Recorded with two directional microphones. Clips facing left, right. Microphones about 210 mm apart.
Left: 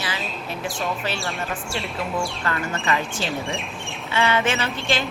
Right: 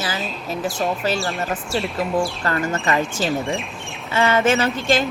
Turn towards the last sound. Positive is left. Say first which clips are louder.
# right 5 dB
turn(degrees=-40)  # may be behind; listen again after turning